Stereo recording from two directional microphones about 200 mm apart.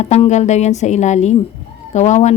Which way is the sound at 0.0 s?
35° left (ahead or behind).